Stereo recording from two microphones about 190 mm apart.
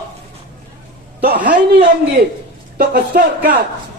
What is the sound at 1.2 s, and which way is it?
Speech, 50° right (ahead or behind).